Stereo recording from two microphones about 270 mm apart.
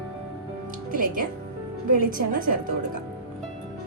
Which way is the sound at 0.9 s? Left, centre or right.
Right.